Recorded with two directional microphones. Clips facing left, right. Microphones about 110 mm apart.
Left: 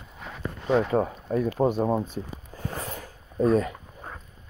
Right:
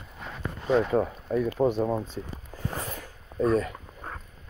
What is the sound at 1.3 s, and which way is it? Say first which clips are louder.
Speech: even; 35° left (ahead or behind).